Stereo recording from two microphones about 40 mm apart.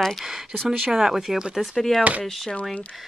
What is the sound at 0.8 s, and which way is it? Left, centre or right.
Speech, centre.